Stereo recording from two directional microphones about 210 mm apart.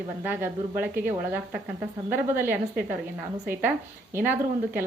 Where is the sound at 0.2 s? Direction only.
10° right (ahead or behind).